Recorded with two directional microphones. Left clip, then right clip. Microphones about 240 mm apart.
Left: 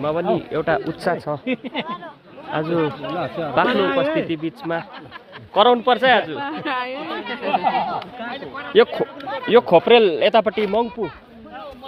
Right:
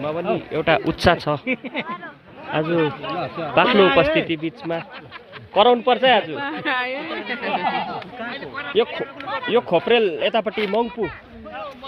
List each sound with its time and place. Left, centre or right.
0.0 s speech: centre
0.5 s a woman's voice: centre
1.5 s a man's voice: left
2.5 s speech: centre
2.7 s speech: centre
3.1 s a man's voice: left
5.5 s a man's voice: centre
7.5 s a man's voice: centre
8.3 s a man's voice: left; by 10.8 s centre